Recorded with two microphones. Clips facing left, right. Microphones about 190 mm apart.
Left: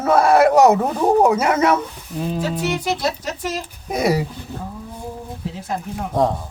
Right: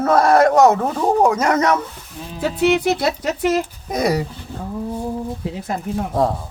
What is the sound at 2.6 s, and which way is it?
Speech, 60° right (ahead or behind).